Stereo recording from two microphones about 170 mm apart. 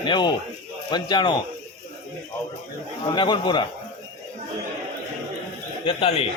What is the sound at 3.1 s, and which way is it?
Speech, 25° left (ahead or behind).